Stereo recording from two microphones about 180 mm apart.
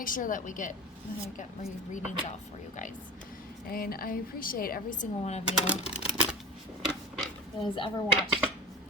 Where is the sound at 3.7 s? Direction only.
55° left (ahead or behind).